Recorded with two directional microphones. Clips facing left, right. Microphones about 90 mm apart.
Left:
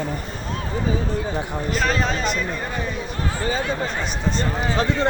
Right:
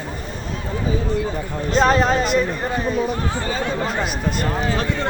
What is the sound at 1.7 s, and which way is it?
Speech, 40° right (ahead or behind).